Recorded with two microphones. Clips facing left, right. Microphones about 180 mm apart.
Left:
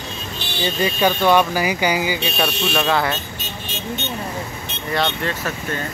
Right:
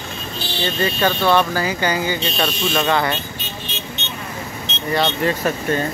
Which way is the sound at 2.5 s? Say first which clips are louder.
Right 1 dB; 65° left (ahead or behind).